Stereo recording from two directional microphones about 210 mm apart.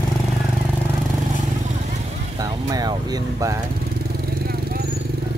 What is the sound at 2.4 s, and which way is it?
Speech, 20° right (ahead or behind).